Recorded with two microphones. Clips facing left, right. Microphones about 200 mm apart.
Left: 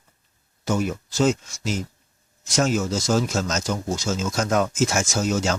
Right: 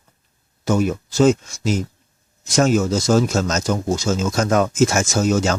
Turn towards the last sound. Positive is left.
turn(degrees=-60)  # may be behind; listen again after turning